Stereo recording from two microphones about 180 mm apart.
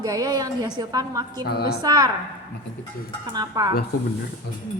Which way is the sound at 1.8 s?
20° right (ahead or behind).